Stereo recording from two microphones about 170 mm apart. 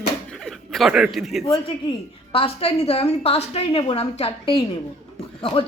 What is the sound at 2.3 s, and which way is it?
A woman's voice, 35° left (ahead or behind).